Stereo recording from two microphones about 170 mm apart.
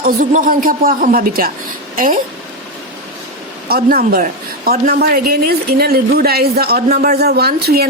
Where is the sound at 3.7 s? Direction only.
60° right (ahead or behind).